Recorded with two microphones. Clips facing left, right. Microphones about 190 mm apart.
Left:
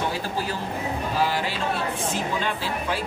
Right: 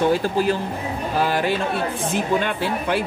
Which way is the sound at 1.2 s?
55° right (ahead or behind).